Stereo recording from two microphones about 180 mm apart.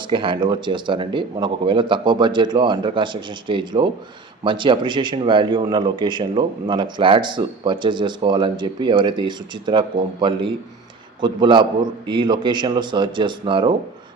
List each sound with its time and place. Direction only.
0.1 s speech: 25° right (ahead or behind)